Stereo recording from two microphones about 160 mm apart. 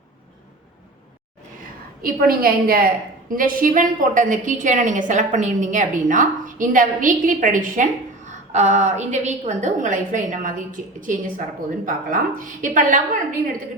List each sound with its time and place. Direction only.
2.0 s a woman's voice: 65° right (ahead or behind)